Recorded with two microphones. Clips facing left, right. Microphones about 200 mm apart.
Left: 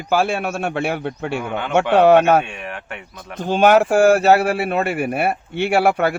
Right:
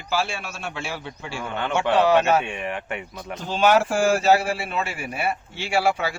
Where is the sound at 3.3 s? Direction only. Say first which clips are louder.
Left 5 dB; 50° left (ahead or behind).